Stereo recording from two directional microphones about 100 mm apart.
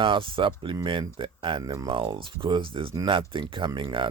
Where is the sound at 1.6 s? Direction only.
40° right (ahead or behind).